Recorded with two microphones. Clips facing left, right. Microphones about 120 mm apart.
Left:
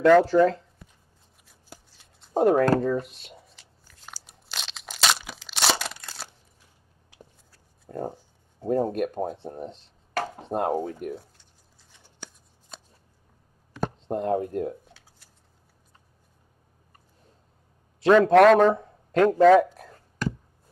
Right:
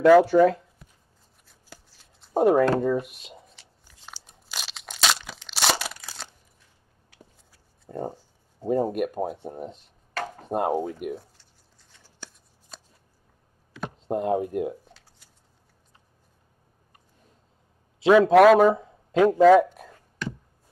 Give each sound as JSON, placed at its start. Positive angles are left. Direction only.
{"t": 0.0, "sound": "speech", "side_deg": -10}
{"t": 2.0, "sound": "shuffling cards", "side_deg": 0}
{"t": 2.8, "sound": "speech", "side_deg": -10}
{"t": 3.3, "sound": "shuffling cards", "side_deg": 0}
{"t": 3.8, "sound": "biting", "side_deg": -5}
{"t": 4.5, "sound": "crunch", "side_deg": 0}
{"t": 7.8, "sound": "speech", "side_deg": 0}
{"t": 11.9, "sound": "scissors", "side_deg": 15}
{"t": 13.8, "sound": "speech", "side_deg": -10}
{"t": 18.0, "sound": "a man's voice", "side_deg": -5}
{"t": 19.6, "sound": "a sound", "side_deg": -15}
{"t": 20.2, "sound": "a sound", "side_deg": 40}